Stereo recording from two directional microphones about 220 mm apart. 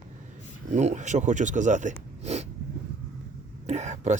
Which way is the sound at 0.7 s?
30° right (ahead or behind).